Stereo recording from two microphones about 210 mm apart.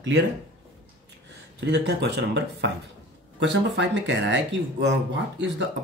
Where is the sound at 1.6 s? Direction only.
55° right (ahead or behind).